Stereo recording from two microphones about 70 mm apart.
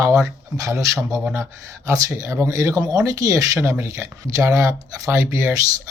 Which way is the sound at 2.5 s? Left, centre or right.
Right.